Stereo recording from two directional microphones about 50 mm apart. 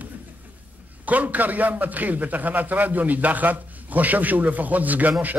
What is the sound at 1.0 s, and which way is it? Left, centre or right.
A man's voice, right.